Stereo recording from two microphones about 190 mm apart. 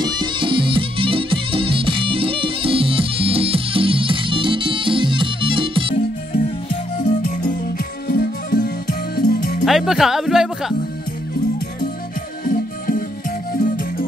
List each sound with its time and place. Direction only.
0.0 s music: 25° right (ahead or behind)
7.1 s music: 45° left (ahead or behind)
9.7 s speech: centre (ahead or behind)
12.4 s music: 50° left (ahead or behind)